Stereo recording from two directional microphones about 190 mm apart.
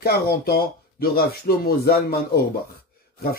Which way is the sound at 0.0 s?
55° left (ahead or behind).